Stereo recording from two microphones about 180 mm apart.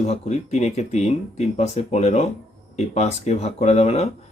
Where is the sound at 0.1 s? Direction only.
40° left (ahead or behind).